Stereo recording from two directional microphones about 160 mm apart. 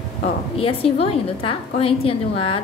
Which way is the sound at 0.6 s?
35° left (ahead or behind).